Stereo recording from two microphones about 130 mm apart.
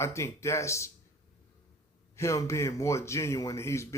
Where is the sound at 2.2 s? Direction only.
20° left (ahead or behind).